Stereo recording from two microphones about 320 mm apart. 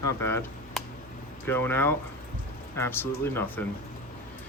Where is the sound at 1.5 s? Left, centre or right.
Centre.